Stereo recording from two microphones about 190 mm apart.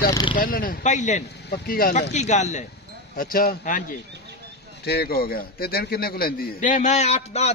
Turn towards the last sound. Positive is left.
turn(degrees=35)  # may be behind; listen again after turning